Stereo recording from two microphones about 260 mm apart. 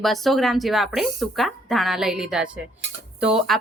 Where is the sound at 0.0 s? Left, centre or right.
Centre.